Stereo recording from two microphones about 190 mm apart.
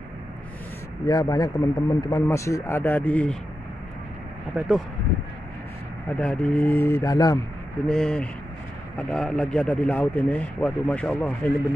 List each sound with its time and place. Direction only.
1.0 s a man's voice: 20° left (ahead or behind)
4.6 s speech: 5° right (ahead or behind)
6.0 s a man's voice: 5° left (ahead or behind)
7.9 s a man's voice: 5° left (ahead or behind)